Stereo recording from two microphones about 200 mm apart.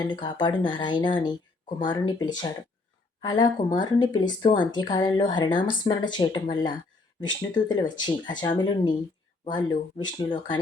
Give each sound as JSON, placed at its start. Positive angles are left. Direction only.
{"t": 0.1, "sound": "speech", "side_deg": 25}